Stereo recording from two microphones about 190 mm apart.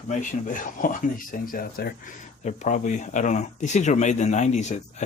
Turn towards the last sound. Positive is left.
turn(degrees=40)  # may be behind; listen again after turning